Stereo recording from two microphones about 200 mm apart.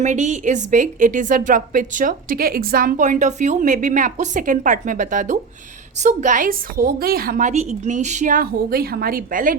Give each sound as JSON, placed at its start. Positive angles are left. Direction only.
{"t": 0.0, "sound": "a woman's voice", "side_deg": -35}